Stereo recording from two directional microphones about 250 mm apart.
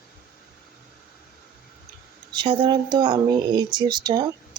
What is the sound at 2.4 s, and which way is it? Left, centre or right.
Speech, centre.